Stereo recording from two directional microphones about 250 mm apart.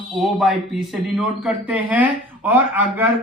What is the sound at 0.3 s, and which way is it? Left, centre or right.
Speech, centre.